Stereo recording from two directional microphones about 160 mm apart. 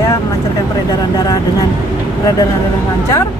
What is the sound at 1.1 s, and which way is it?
Speech, 25° left (ahead or behind).